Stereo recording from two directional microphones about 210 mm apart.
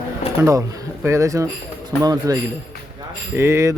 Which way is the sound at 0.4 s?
15° right (ahead or behind).